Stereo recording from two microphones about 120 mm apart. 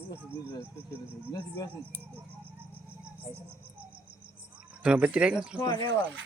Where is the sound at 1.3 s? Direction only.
30° left (ahead or behind).